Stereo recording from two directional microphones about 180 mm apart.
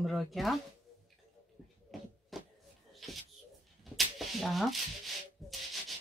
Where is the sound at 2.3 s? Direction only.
Centre (ahead or behind).